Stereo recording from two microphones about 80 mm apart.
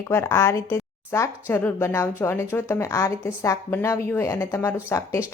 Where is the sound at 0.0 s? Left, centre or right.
Left.